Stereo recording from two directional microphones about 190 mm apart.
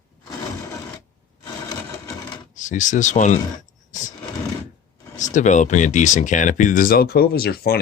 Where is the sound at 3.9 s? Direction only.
40° left (ahead or behind).